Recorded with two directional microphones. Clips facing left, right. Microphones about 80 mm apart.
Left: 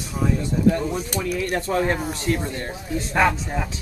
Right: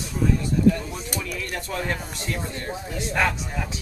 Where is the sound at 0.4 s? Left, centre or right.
Left.